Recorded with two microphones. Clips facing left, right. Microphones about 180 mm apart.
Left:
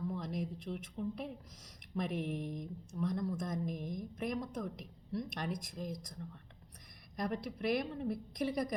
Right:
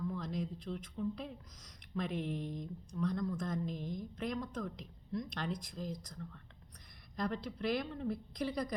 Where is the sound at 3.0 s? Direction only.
20° left (ahead or behind).